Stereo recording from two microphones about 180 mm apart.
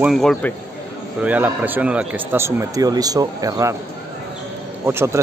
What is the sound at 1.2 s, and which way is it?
Speech, 10° right (ahead or behind).